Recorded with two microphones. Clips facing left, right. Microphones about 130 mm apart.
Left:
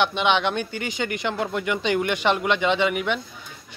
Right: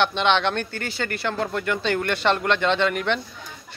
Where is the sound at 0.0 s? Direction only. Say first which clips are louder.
Right 1 dB; 10° left (ahead or behind).